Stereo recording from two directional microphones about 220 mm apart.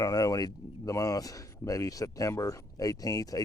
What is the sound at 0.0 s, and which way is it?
A man's voice, 15° left (ahead or behind).